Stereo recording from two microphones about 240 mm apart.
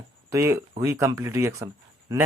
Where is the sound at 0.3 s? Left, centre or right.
Centre.